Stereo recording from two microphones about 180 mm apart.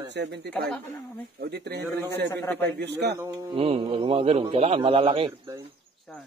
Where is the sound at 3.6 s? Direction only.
30° right (ahead or behind).